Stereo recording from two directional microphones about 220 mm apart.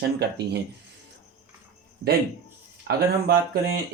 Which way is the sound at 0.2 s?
50° right (ahead or behind).